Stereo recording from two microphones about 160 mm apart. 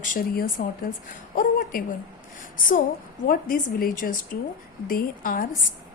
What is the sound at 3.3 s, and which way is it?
Speech, 60° left (ahead or behind).